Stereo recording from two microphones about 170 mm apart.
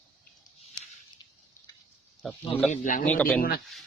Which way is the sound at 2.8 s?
50° left (ahead or behind).